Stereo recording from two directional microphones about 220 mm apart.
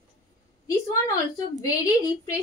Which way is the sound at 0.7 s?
15° left (ahead or behind).